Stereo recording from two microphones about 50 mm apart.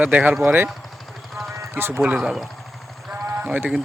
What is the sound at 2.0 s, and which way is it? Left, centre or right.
Speech, right.